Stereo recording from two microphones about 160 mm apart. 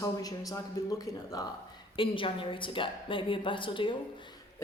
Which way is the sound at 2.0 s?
35° left (ahead or behind).